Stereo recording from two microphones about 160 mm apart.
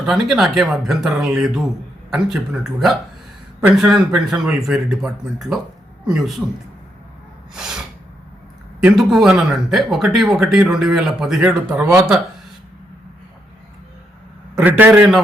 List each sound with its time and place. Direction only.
0.0 s speech: centre (ahead or behind)
7.5 s snort: 5° right (ahead or behind)
8.8 s speech: centre (ahead or behind)
14.5 s a man's voice: 10° right (ahead or behind)